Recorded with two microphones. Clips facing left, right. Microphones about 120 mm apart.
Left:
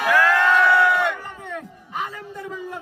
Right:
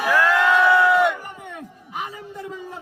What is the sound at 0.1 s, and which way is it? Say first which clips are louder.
Crowd: even; 20° right (ahead or behind).